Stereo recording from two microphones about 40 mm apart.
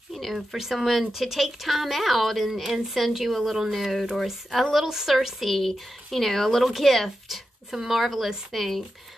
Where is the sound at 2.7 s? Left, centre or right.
Centre.